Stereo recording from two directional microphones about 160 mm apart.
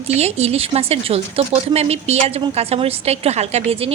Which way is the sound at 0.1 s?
40° right (ahead or behind).